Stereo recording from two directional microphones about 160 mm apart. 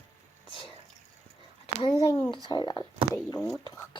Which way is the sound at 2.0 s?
20° left (ahead or behind).